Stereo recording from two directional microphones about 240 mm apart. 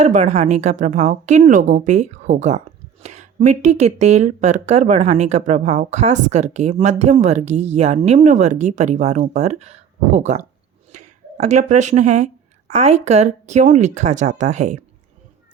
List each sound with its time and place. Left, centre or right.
0.0 s speech: right